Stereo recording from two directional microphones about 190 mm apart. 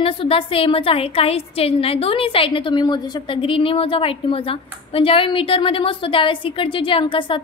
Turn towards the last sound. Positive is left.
turn(degrees=25)  # may be behind; listen again after turning